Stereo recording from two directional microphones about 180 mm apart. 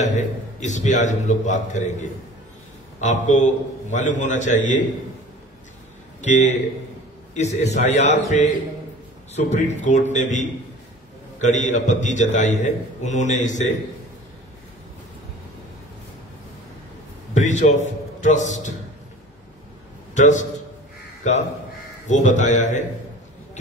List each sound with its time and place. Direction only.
0.0 s a man's voice: 40° left (ahead or behind)
6.2 s a man's voice: 40° left (ahead or behind)
11.3 s a man's voice: 40° left (ahead or behind)
17.3 s a man's voice: 40° left (ahead or behind)
20.2 s a man's voice: 40° left (ahead or behind)
22.0 s a man's voice: 45° left (ahead or behind)